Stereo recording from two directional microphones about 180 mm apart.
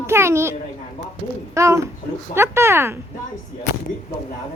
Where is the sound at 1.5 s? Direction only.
15° right (ahead or behind).